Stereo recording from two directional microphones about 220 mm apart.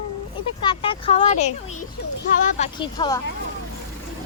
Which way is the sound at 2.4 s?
30° left (ahead or behind).